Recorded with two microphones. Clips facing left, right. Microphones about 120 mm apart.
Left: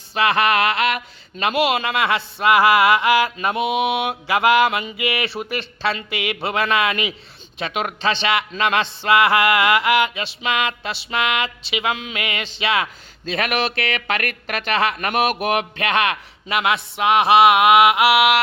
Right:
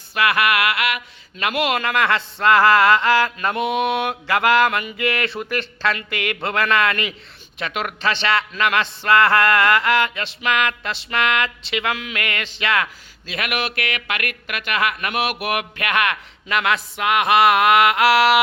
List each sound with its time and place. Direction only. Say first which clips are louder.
0.1 s mantra: left 1 dB; 25° left (ahead or behind)
10.4 s speech: right 1 dB; 20° left (ahead or behind)
13.2 s speech: left 4 dB; 35° left (ahead or behind)
14.9 s speech: left 3 dB; 45° left (ahead or behind)
15.4 s speech: left 3 dB; 25° left (ahead or behind)
18.1 s music: right 1 dB; 5° left (ahead or behind)